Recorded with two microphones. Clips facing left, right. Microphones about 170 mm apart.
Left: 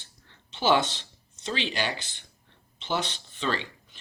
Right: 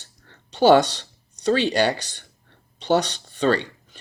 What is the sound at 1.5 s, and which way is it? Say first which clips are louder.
Speech: right 11 dB; 45° right (ahead or behind).